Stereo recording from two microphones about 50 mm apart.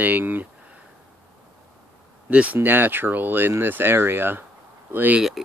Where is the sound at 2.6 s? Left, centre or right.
Right.